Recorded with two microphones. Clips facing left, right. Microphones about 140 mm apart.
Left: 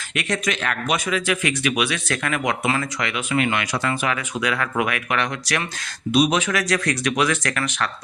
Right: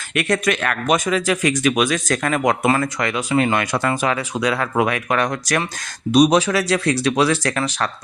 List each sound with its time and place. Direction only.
0.1 s speech: 55° right (ahead or behind); by 3.6 s 35° right (ahead or behind)
3.6 s speech: 50° right (ahead or behind)
4.0 s speech: 35° right (ahead or behind)